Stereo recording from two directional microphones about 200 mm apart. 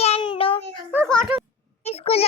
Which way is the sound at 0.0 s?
25° left (ahead or behind).